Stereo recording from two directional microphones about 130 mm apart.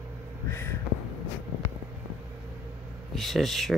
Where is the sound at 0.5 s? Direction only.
20° left (ahead or behind).